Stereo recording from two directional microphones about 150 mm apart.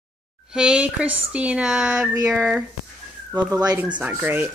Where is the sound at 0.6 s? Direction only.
5° right (ahead or behind).